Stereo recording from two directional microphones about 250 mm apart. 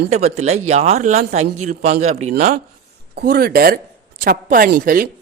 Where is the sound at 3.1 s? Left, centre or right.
Right.